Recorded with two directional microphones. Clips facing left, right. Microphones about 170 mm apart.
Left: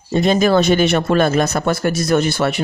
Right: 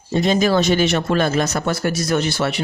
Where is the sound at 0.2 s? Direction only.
55° left (ahead or behind).